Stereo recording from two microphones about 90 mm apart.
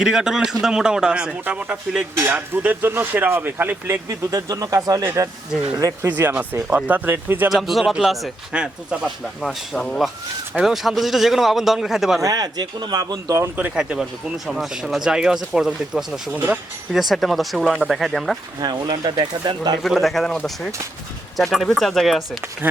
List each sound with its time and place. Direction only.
0.0 s speech: 5° right (ahead or behind); by 4.0 s 25° right (ahead or behind)
4.1 s speech: 45° right (ahead or behind)
6.1 s speech: 20° right (ahead or behind)
7.5 s speech: centre (ahead or behind)
9.4 s speech: 5° left (ahead or behind)
10.5 s speech: 5° right (ahead or behind)
12.2 s speech: 45° right (ahead or behind)
13.6 s speech: 15° right (ahead or behind)
18.6 s speech: 50° right (ahead or behind)
19.8 s speech: centre (ahead or behind)
22.6 s speech: 20° right (ahead or behind)